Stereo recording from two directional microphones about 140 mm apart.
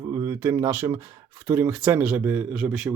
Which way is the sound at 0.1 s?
20° right (ahead or behind).